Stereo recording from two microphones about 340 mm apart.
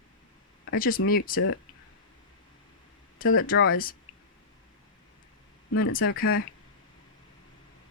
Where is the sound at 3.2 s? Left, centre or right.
Left.